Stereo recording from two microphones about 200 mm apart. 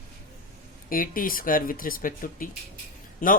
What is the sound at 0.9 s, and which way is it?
A woman's voice, 45° left (ahead or behind).